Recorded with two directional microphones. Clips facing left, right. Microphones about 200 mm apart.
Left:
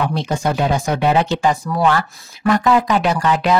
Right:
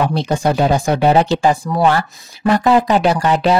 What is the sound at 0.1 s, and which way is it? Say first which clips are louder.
Speech: right 3 dB; 35° right (ahead or behind).